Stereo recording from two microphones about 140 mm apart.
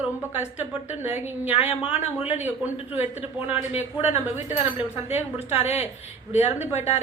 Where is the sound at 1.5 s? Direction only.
50° left (ahead or behind).